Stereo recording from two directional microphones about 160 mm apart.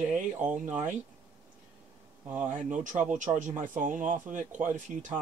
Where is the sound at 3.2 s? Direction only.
50° right (ahead or behind).